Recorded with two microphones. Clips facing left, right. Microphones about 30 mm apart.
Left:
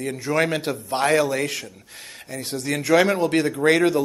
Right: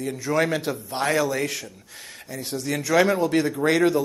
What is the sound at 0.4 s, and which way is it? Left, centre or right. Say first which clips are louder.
A man's voice: left 1 dB; left.